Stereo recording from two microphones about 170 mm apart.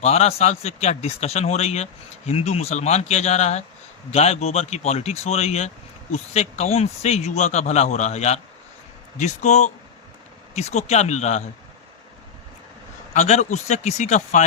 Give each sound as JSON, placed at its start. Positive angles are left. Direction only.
{"t": 0.0, "sound": "speech", "side_deg": 40}
{"t": 13.1, "sound": "speech", "side_deg": 45}